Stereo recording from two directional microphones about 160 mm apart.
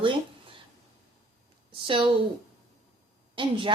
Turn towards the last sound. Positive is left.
turn(degrees=-30)  # may be behind; listen again after turning